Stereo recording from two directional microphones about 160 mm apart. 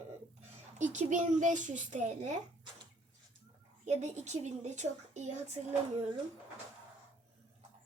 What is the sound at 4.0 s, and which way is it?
A child's voice, 45° right (ahead or behind).